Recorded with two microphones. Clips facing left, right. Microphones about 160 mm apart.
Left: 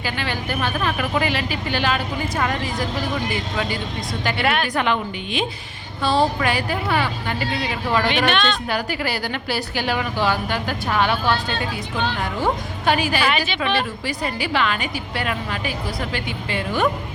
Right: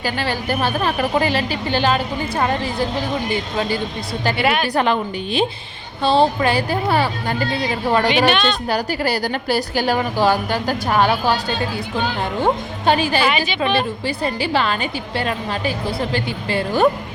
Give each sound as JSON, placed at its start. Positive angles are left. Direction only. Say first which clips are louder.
{"t": 0.0, "sound": "a woman's voice", "louder": "right 4 dB", "side_deg": -40}
{"t": 4.4, "sound": "a woman's voice", "louder": "right 2 dB", "side_deg": -5}
{"t": 4.6, "sound": "a woman's voice", "louder": "right 3 dB", "side_deg": -35}
{"t": 8.3, "sound": "speech", "louder": "right 2 dB", "side_deg": -5}
{"t": 8.7, "sound": "a woman's voice", "louder": "right 4 dB", "side_deg": -40}
{"t": 11.4, "sound": "speech", "louder": "right 3 dB", "side_deg": -10}
{"t": 12.4, "sound": "a woman's voice", "louder": "right 4 dB", "side_deg": -30}
{"t": 13.2, "sound": "a woman's voice", "louder": "right 2 dB", "side_deg": 0}
{"t": 13.7, "sound": "a woman's voice", "louder": "right 3 dB", "side_deg": -30}